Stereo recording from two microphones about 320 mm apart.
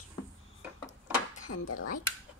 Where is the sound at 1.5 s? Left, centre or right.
Left.